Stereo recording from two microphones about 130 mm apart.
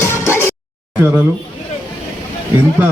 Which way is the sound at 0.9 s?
10° right (ahead or behind).